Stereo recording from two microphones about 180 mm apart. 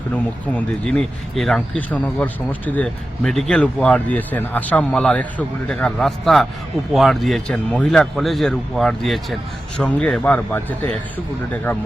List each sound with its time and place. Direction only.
0.4 s speech: 5° left (ahead or behind)